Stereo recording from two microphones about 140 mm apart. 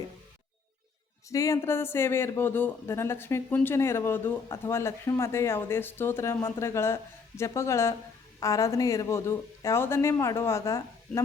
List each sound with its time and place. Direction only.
1.3 s speech: 20° left (ahead or behind)